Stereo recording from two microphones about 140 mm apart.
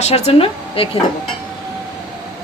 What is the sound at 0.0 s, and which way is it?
Speech, 45° left (ahead or behind).